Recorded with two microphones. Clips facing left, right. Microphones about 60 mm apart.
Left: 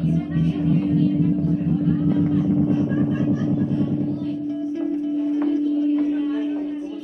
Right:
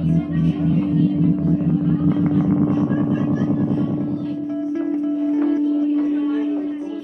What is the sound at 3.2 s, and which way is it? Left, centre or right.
Music, right.